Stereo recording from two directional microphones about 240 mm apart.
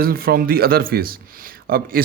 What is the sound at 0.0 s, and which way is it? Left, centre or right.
Speech, right.